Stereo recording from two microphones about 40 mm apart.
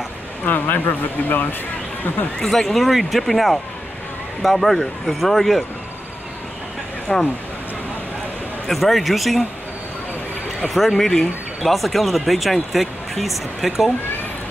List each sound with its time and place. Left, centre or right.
0.5 s speech: left
2.5 s speech: centre
7.1 s speech: centre
8.6 s speech: centre
10.7 s speech: centre